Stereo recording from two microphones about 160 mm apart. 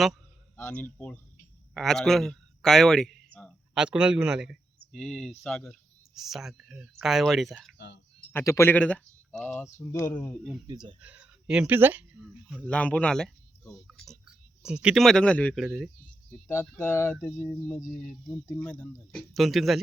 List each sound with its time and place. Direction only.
0.5 s a man's voice: 10° left (ahead or behind)
3.8 s speech: 5° right (ahead or behind)
7.8 s speech: 90° left
8.3 s speech: 15° left (ahead or behind)
10.7 s speech: 25° right (ahead or behind)
11.0 s speech: 10° right (ahead or behind)
12.6 s speech: 10° left (ahead or behind)
16.7 s speech: 15° left (ahead or behind)
17.2 s speech: centre (ahead or behind)
18.4 s speech: 10° left (ahead or behind)